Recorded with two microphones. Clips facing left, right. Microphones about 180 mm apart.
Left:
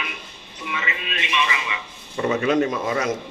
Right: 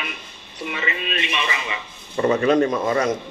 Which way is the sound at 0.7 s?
35° right (ahead or behind).